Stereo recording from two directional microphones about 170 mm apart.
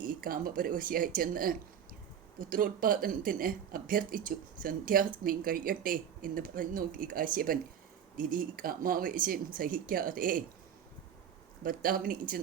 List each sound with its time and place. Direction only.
0.0 s speech: 55° right (ahead or behind)
11.6 s speech: 55° right (ahead or behind)